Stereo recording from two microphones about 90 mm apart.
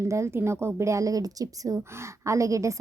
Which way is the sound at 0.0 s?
30° right (ahead or behind).